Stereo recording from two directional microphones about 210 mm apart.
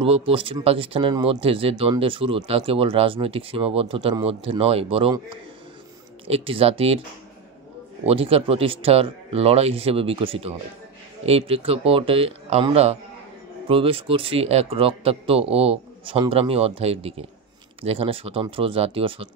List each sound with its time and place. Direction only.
0.0 s speech: 25° right (ahead or behind)
6.2 s speech: 25° right (ahead or behind)
8.0 s speech: 30° right (ahead or behind)